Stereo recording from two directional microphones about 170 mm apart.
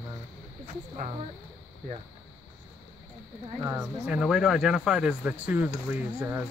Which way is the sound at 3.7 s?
5° right (ahead or behind).